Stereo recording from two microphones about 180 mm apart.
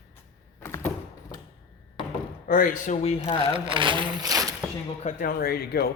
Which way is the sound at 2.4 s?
50° left (ahead or behind).